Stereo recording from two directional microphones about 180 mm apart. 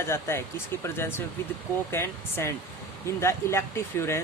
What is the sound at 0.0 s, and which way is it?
Speech, 15° left (ahead or behind).